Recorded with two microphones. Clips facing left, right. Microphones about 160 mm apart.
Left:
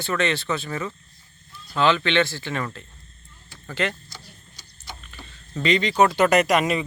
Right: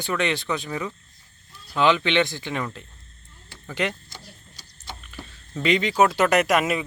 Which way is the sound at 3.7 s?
15° right (ahead or behind).